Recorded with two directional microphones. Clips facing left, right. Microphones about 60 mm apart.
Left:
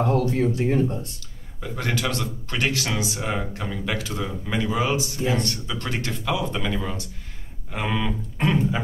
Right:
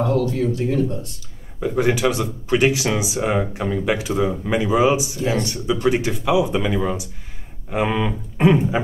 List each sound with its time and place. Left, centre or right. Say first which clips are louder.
0.0 s speech: right 2 dB; left
1.6 s speech: right 8 dB; centre